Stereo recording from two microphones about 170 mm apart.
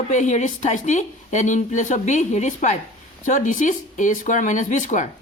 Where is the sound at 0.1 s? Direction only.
45° left (ahead or behind).